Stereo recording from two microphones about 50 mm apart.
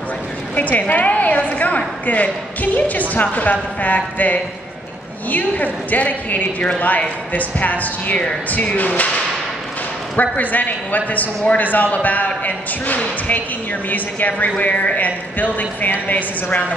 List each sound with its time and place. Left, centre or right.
0.6 s a woman's voice: left